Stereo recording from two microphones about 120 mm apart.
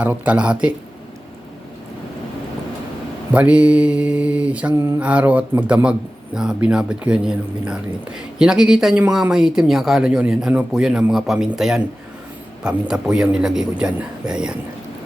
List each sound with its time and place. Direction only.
0.0 s speech: 10° right (ahead or behind)
3.3 s speech: 10° right (ahead or behind)
4.7 s mantra: 20° right (ahead or behind)
4.9 s speech: 10° right (ahead or behind)